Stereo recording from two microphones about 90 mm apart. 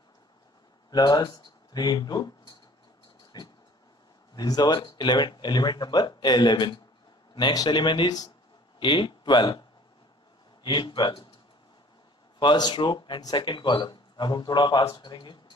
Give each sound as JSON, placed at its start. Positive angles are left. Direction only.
{"t": 0.8, "sound": "speech", "side_deg": 50}
{"t": 3.3, "sound": "a sound", "side_deg": 45}
{"t": 4.4, "sound": "speech", "side_deg": 50}
{"t": 10.6, "sound": "speech", "side_deg": 60}
{"t": 12.4, "sound": "speech", "side_deg": 55}